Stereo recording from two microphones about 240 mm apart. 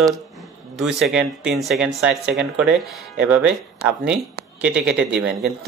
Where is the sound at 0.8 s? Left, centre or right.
Centre.